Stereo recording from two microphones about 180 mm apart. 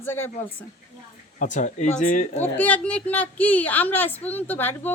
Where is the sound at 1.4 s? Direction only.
45° left (ahead or behind).